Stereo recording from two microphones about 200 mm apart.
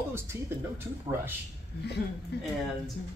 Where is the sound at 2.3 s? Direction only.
55° left (ahead or behind).